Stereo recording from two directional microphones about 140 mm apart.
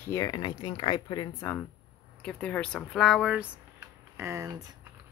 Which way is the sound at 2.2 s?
10° left (ahead or behind).